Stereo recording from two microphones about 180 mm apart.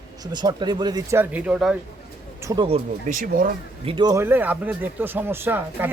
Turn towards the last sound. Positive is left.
turn(degrees=-10)  # may be behind; listen again after turning